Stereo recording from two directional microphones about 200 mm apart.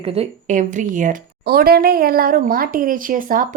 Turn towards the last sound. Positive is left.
turn(degrees=-45)  # may be behind; listen again after turning